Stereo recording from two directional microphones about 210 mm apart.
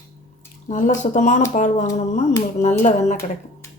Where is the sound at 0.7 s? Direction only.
35° left (ahead or behind).